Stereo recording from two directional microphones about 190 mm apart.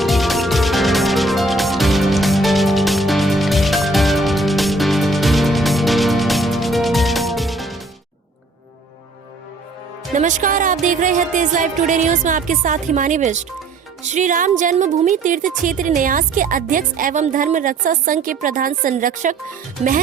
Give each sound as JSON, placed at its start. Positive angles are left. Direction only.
{"t": 0.0, "sound": "music", "side_deg": 0}
{"t": 10.2, "sound": "music", "side_deg": -40}
{"t": 14.0, "sound": "speech", "side_deg": -40}